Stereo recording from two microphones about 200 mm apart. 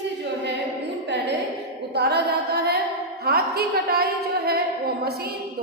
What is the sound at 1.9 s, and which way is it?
A woman's voice, 55° right (ahead or behind).